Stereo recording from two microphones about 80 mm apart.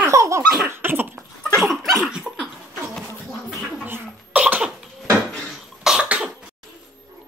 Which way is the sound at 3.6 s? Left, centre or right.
Centre.